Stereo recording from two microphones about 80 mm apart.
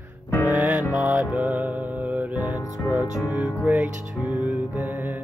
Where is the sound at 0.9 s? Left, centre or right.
Right.